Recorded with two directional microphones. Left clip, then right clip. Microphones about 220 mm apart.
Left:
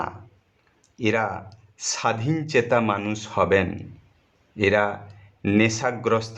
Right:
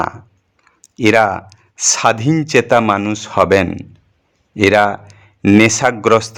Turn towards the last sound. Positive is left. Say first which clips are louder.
# right 11 dB
turn(degrees=-40)  # may be behind; listen again after turning